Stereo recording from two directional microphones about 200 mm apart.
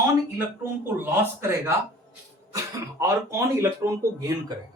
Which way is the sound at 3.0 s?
15° right (ahead or behind).